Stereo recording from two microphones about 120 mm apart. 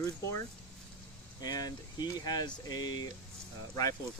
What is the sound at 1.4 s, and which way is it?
Speech, 35° left (ahead or behind).